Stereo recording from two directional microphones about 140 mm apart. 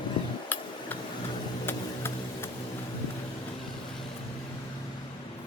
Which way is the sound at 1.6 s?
15° left (ahead or behind).